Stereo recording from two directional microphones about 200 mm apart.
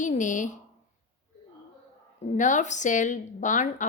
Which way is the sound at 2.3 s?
40° left (ahead or behind).